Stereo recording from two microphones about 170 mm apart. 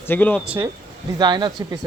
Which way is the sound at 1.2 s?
25° right (ahead or behind).